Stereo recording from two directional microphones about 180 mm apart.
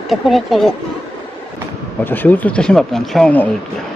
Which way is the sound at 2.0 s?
10° left (ahead or behind).